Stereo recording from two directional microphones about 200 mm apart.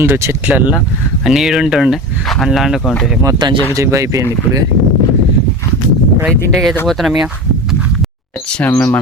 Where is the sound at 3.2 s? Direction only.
20° right (ahead or behind).